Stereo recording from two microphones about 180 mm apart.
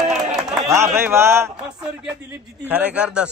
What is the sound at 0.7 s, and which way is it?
Speech, 15° right (ahead or behind).